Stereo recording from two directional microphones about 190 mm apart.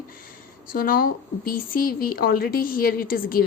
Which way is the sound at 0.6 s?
50° left (ahead or behind).